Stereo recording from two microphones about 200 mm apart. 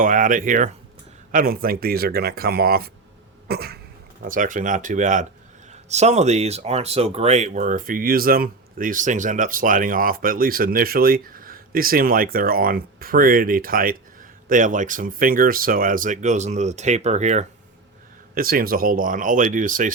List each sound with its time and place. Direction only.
0.0 s speech: 40° right (ahead or behind)
4.2 s speech: 40° right (ahead or behind)
18.3 s speech: 45° right (ahead or behind)